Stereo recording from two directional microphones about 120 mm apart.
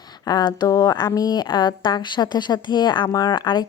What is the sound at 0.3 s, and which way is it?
A woman's voice, 35° left (ahead or behind).